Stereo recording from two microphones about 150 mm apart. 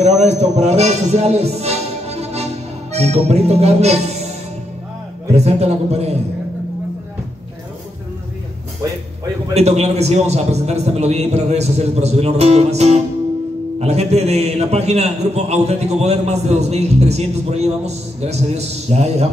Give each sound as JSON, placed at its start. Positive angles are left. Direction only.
{"t": 0.0, "sound": "speech", "side_deg": -45}
{"t": 5.3, "sound": "a man's voice", "side_deg": -45}
{"t": 9.5, "sound": "a man's voice", "side_deg": -45}